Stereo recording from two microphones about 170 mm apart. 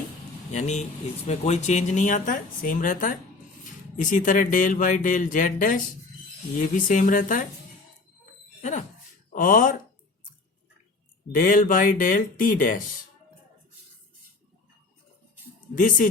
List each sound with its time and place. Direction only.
0.5 s speech: 40° left (ahead or behind)
9.3 s speech: 55° left (ahead or behind)
11.3 s speech: 50° left (ahead or behind)
15.7 s speech: 55° left (ahead or behind)